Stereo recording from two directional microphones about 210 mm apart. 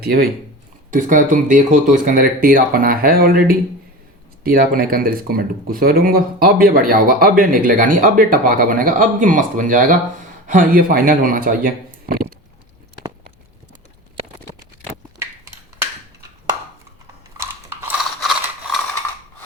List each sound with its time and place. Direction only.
0.0 s speech: 50° right (ahead or behind)
17.3 s a sound: 15° right (ahead or behind)
18.2 s mechanisms: centre (ahead or behind)